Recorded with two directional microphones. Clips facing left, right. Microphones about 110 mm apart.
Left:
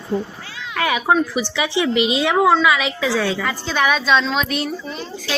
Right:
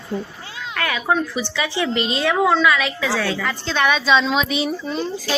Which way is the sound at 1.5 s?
15° left (ahead or behind).